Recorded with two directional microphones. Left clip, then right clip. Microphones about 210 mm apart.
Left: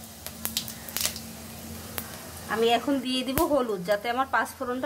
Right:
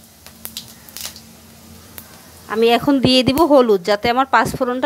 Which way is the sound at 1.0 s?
5° left (ahead or behind).